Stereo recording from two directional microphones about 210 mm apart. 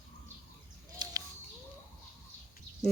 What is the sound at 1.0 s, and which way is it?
Bird, 20° right (ahead or behind).